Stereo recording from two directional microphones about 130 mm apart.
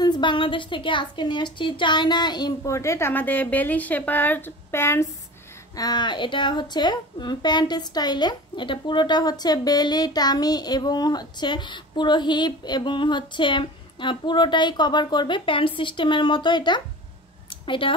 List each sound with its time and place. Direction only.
0.0 s a woman's voice: 35° left (ahead or behind); by 5.0 s 20° left (ahead or behind)
5.8 s a woman's voice: 30° left (ahead or behind)
17.5 s a sound: 40° left (ahead or behind)